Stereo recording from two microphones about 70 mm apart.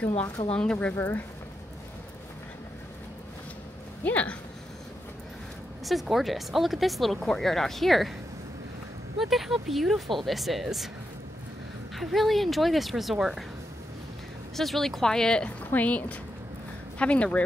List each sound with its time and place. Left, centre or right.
0.5 s speech: centre
0.9 s speech: left
4.0 s speech: left
5.9 s speech: centre
9.2 s speech: centre
11.9 s speech: centre
14.6 s speech: centre
15.6 s a woman's voice: left